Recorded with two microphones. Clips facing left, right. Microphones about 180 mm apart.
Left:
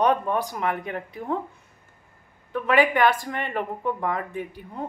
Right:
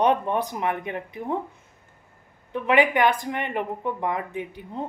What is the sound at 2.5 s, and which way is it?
Speech, 20° right (ahead or behind).